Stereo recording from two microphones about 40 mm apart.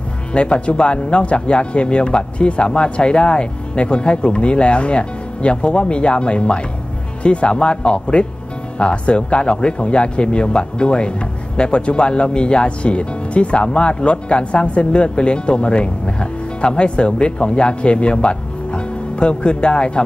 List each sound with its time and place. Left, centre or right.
0.3 s speech: left